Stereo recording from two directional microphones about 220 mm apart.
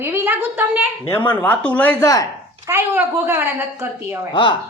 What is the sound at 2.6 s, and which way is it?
A woman's voice, 10° right (ahead or behind).